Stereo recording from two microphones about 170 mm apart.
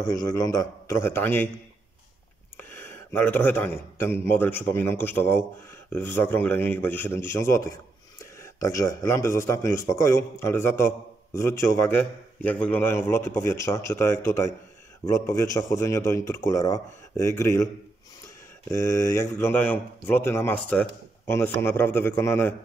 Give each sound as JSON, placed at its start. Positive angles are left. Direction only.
{"t": 0.0, "sound": "a man's voice", "side_deg": 20}
{"t": 2.5, "sound": "a man's voice", "side_deg": 15}
{"t": 18.7, "sound": "a man's voice", "side_deg": 15}